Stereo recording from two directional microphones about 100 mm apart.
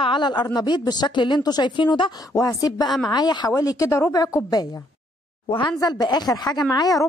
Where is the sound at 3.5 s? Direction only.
35° left (ahead or behind).